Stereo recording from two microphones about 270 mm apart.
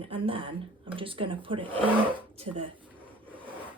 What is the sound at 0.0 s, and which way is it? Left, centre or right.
Speech, centre.